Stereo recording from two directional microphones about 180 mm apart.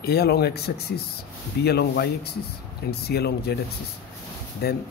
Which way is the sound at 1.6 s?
65° left (ahead or behind).